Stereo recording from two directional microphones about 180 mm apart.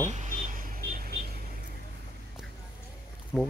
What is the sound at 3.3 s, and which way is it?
Speech, 15° left (ahead or behind).